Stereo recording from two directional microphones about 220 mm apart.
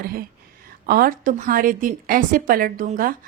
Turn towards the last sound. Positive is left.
turn(degrees=-40)  # may be behind; listen again after turning